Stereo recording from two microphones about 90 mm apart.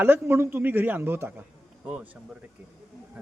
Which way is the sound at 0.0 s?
25° right (ahead or behind).